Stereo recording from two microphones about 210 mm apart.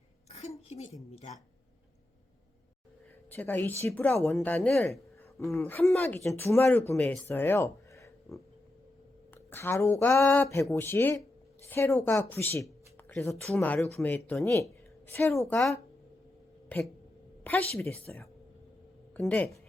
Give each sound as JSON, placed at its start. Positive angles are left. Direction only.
{"t": 0.3, "sound": "a sound", "side_deg": 30}
{"t": 1.1, "sound": "speech", "side_deg": 30}
{"t": 3.2, "sound": "speech", "side_deg": 10}
{"t": 9.5, "sound": "speech", "side_deg": 10}
{"t": 16.6, "sound": "a sound", "side_deg": 5}
{"t": 17.4, "sound": "speech", "side_deg": 10}